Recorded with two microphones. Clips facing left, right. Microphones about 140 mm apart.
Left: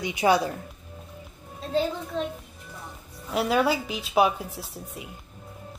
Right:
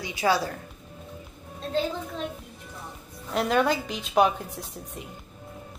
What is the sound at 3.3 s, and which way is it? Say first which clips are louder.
Speech: even; 5° left (ahead or behind).